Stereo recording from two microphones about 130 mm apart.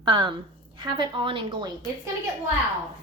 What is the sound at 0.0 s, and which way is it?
A woman's voice, 40° right (ahead or behind).